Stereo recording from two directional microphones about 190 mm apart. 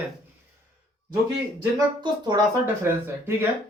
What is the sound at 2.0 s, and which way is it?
Speech, 20° right (ahead or behind).